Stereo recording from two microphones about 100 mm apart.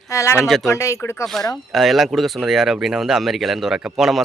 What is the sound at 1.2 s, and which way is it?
Speech, 5° left (ahead or behind).